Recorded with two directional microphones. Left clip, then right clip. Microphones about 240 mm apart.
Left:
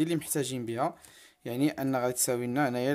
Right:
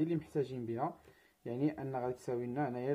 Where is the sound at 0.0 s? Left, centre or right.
Left.